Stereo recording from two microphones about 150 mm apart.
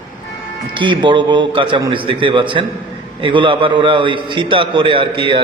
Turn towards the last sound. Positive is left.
turn(degrees=-35)  # may be behind; listen again after turning